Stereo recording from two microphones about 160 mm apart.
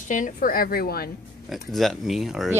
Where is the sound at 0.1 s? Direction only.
55° left (ahead or behind); by 1.1 s 70° left (ahead or behind).